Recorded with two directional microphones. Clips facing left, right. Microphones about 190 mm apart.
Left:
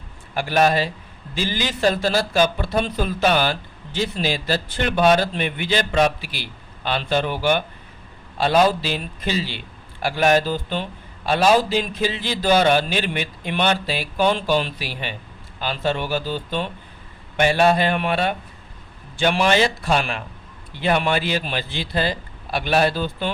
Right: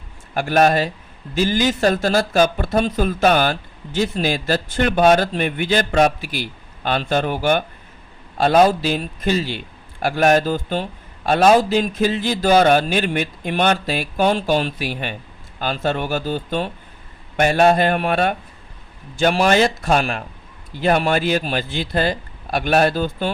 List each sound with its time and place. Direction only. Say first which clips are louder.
0.3 s speech: right 3 dB; 50° right (ahead or behind)